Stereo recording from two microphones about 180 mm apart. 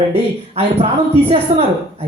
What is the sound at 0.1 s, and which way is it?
Speech, 35° right (ahead or behind).